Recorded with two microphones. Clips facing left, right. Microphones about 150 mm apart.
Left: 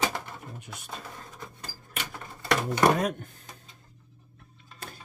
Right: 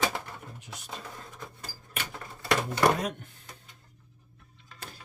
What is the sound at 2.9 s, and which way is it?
Speech, 45° left (ahead or behind).